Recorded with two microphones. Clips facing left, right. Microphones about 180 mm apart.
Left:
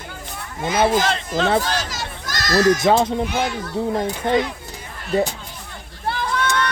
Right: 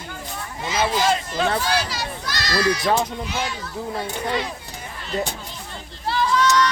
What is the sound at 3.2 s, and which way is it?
A child's voice, 55° left (ahead or behind).